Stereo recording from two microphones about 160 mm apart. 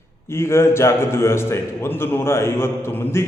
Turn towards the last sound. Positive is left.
turn(degrees=15)  # may be behind; listen again after turning